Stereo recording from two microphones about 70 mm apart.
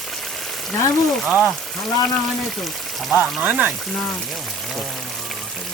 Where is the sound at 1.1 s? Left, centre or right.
Centre.